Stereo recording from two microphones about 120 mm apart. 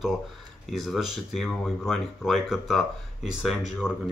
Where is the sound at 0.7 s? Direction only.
Centre (ahead or behind).